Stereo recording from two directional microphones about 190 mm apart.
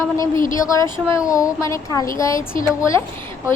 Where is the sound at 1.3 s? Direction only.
15° left (ahead or behind).